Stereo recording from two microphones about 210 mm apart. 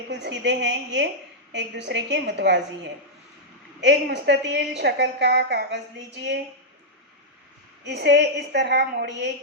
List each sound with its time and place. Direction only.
0.1 s a woman's voice: 55° right (ahead or behind)
3.8 s a woman's voice: 55° right (ahead or behind)
7.9 s a woman's voice: 55° right (ahead or behind)